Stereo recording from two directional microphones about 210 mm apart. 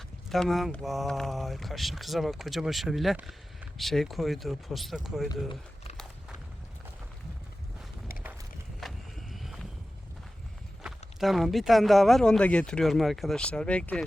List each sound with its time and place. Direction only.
0.3 s speech: centre (ahead or behind)
5.5 s crumpling: 30° left (ahead or behind)
8.8 s vehicle: centre (ahead or behind)
10.8 s speech: centre (ahead or behind)